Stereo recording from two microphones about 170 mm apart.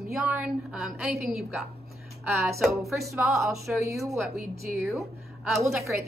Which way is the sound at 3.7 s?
5° right (ahead or behind).